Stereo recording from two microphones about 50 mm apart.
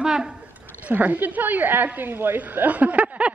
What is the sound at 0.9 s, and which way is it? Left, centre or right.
A woman's voice, right.